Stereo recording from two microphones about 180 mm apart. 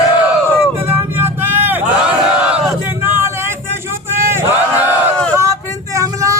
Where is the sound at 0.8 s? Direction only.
10° right (ahead or behind).